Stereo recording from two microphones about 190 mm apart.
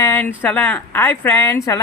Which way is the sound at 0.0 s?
10° left (ahead or behind).